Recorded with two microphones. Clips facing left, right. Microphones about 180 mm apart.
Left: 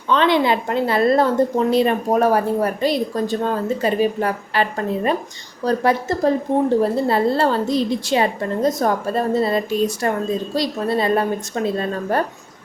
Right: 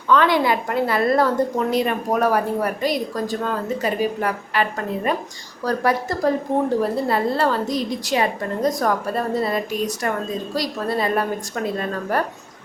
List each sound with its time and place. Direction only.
0.1 s a woman's voice: 25° left (ahead or behind)